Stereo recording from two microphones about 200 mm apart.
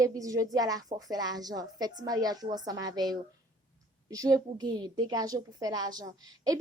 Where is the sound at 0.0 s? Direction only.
15° right (ahead or behind).